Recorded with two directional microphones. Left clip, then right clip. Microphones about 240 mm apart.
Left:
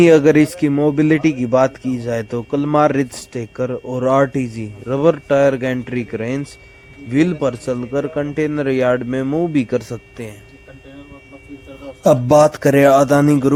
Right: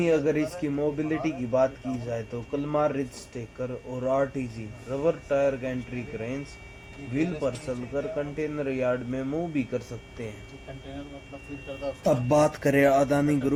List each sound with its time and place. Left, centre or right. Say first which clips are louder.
0.0 s speech: left 14 dB; left
12.0 s a man's voice: left 12 dB; left